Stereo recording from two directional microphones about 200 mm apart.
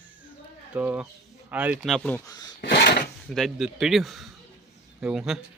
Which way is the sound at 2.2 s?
20° left (ahead or behind).